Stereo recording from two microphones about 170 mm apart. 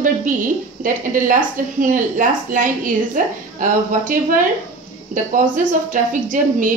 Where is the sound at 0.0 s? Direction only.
50° right (ahead or behind).